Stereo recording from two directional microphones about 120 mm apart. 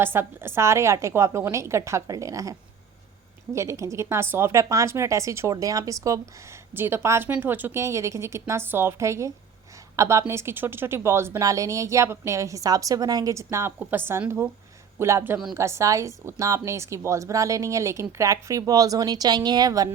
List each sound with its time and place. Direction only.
0.0 s a woman's voice: 20° right (ahead or behind)